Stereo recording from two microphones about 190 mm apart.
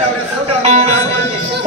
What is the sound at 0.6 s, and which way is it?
Music, 35° right (ahead or behind).